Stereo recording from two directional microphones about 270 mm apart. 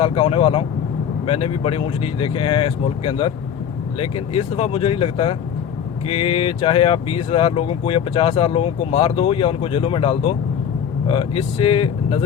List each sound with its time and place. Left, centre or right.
0.0 s speech: left